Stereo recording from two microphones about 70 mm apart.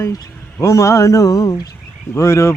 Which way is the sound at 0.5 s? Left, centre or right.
Left.